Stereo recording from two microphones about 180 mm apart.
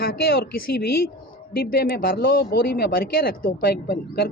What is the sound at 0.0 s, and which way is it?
Speech, 55° left (ahead or behind).